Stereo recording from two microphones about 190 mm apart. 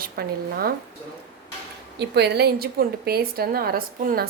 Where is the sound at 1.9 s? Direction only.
60° right (ahead or behind).